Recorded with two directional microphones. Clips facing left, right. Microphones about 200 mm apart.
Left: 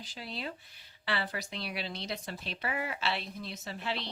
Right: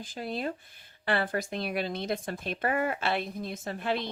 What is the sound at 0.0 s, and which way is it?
Speech, 50° right (ahead or behind).